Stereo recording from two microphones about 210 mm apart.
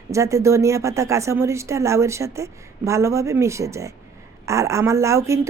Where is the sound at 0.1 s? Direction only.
15° right (ahead or behind).